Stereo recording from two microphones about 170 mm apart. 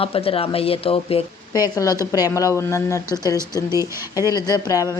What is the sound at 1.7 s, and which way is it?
Speech, 20° left (ahead or behind).